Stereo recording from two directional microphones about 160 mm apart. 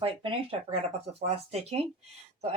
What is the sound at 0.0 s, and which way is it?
Speech, 35° right (ahead or behind).